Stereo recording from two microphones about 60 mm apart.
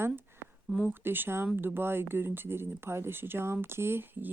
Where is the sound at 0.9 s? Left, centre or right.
Right.